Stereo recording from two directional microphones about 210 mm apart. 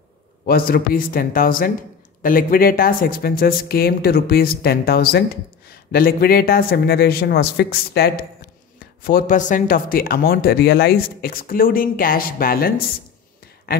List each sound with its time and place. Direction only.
0.5 s speech: 45° left (ahead or behind)